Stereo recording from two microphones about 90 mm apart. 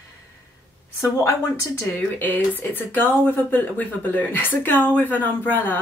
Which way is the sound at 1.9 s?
20° left (ahead or behind).